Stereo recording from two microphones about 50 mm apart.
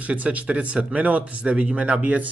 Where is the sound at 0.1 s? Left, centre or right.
Right.